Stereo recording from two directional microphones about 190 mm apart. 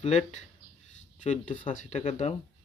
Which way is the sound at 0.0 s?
35° left (ahead or behind).